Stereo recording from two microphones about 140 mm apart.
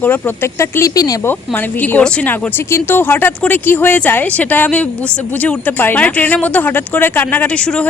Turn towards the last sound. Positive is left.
turn(degrees=5)  # may be behind; listen again after turning